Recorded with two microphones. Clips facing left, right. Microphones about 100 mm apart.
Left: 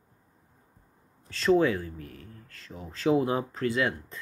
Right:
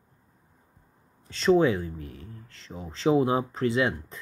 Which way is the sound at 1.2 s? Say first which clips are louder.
Right 2 dB; 20° right (ahead or behind).